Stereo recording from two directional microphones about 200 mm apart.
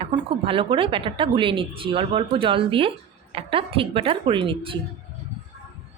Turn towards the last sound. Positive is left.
turn(degrees=-25)  # may be behind; listen again after turning